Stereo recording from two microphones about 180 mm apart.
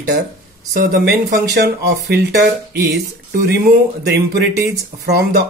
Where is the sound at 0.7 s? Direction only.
70° right (ahead or behind).